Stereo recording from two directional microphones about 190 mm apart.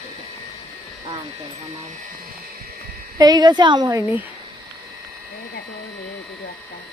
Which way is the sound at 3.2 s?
20° right (ahead or behind).